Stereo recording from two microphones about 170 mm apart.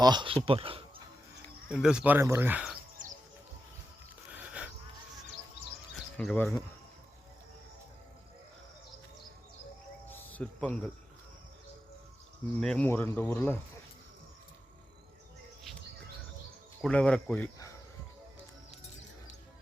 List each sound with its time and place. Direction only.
0.0 s speech: 25° right (ahead or behind)
0.4 s a sound: 30° right (ahead or behind)
1.7 s speech: 5° right (ahead or behind)
4.3 s a sound: 10° right (ahead or behind)
6.1 s speech: 10° left (ahead or behind)
10.1 s cricket: 10° left (ahead or behind)
12.5 s speech: 5° left (ahead or behind)
16.8 s speech: 5° left (ahead or behind)